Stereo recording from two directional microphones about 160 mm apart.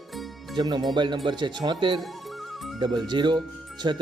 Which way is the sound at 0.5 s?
25° right (ahead or behind).